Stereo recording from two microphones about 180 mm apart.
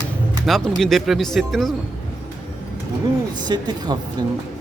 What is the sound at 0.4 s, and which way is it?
Speech, centre (ahead or behind).